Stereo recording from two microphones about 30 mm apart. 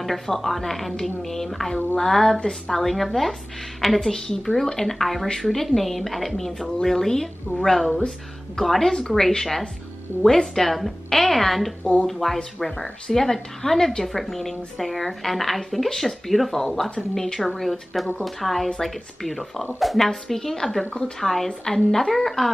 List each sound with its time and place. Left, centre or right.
0.0 s speech: centre
2.8 s a woman's voice: centre
11.8 s speech: left
12.1 s a woman's voice: centre